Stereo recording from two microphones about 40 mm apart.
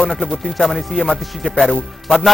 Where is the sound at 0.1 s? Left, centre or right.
Centre.